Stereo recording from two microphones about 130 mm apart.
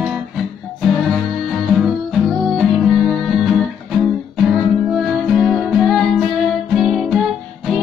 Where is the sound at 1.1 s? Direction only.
Centre (ahead or behind).